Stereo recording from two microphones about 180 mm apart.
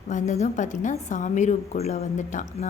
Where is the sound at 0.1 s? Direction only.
40° left (ahead or behind).